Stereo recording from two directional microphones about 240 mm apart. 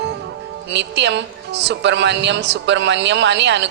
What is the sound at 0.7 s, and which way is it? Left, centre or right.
Speech, right.